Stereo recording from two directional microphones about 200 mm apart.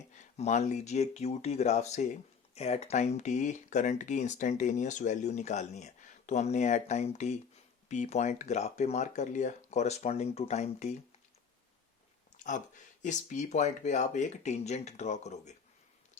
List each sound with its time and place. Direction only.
0.2 s speech: 35° left (ahead or behind)
12.4 s speech: 40° left (ahead or behind)